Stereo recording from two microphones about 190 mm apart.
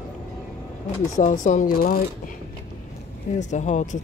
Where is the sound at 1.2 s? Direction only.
40° left (ahead or behind).